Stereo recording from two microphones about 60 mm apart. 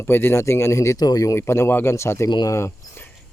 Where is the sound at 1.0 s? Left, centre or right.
Left.